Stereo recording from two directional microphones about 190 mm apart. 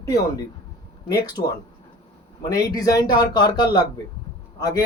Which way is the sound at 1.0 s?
20° left (ahead or behind).